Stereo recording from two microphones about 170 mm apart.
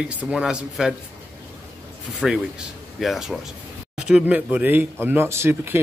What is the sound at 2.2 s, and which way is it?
Speech, centre (ahead or behind).